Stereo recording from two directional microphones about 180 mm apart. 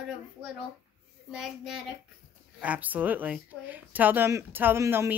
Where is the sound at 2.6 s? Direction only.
10° right (ahead or behind).